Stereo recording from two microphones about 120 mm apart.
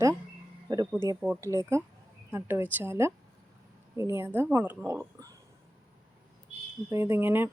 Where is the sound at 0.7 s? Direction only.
35° right (ahead or behind).